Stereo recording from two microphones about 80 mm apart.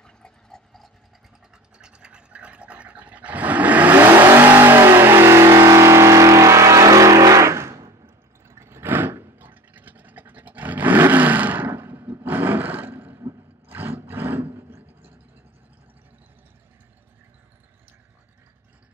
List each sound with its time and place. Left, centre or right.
0.0 s clip-clop: centre
1.8 s vehicle: centre; by 7.9 s right
8.5 s toothbrush: right
13.7 s a sound: right